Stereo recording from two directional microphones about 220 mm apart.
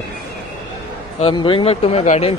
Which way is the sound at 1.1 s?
25° left (ahead or behind).